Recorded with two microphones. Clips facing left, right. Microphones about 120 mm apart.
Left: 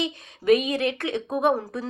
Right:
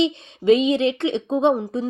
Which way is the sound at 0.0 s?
25° right (ahead or behind).